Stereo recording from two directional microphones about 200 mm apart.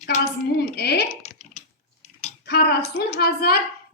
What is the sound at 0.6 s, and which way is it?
Speech, 55° left (ahead or behind).